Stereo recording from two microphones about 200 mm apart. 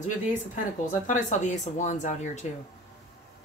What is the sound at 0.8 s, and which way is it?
Speech, 40° left (ahead or behind).